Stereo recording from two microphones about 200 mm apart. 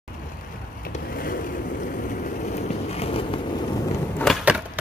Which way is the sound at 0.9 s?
45° left (ahead or behind).